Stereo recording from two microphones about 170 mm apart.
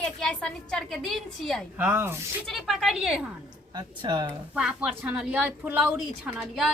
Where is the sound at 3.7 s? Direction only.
25° right (ahead or behind).